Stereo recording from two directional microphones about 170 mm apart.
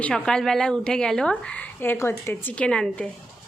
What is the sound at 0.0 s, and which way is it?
A woman's voice, 5° left (ahead or behind).